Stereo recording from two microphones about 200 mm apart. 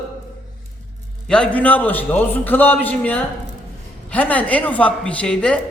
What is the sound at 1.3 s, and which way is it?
A man's voice, 5° left (ahead or behind).